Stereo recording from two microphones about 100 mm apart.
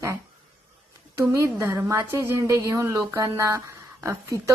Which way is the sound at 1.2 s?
30° right (ahead or behind).